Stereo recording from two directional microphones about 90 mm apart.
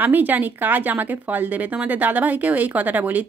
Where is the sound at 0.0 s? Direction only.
20° right (ahead or behind).